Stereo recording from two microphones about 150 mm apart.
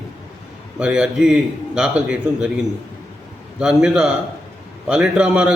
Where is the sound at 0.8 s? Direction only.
5° right (ahead or behind).